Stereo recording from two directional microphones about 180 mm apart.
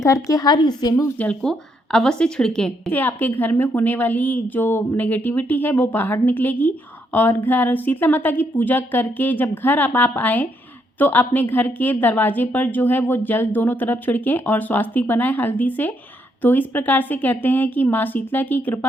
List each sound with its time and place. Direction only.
0.0 s a woman's voice: 20° left (ahead or behind)
1.2 s a woman's voice: 5° left (ahead or behind)